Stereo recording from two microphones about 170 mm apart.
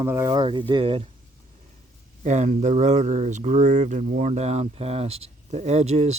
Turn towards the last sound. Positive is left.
turn(degrees=-40)  # may be behind; listen again after turning